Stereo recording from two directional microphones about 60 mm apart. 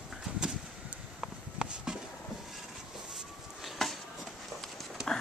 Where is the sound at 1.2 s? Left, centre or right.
Centre.